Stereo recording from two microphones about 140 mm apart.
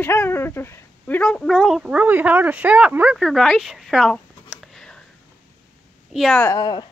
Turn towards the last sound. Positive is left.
turn(degrees=30)  # may be behind; listen again after turning